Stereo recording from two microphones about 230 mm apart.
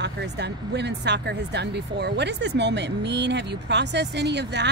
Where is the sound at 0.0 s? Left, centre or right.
Right.